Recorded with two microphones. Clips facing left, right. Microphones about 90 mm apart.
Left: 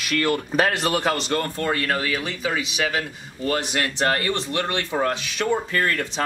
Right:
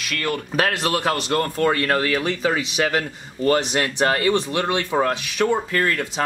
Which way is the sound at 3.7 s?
20° right (ahead or behind).